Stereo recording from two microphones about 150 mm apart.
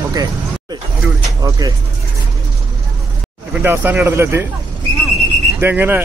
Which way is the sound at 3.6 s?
15° right (ahead or behind).